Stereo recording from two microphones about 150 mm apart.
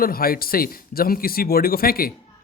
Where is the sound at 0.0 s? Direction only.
80° left.